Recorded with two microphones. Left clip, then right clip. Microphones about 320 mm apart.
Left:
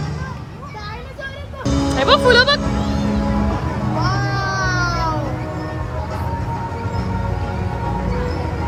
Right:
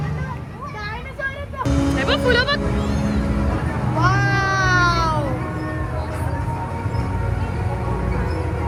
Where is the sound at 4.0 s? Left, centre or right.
Right.